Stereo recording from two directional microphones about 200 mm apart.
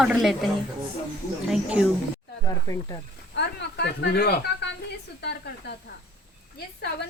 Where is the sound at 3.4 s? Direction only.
55° left (ahead or behind).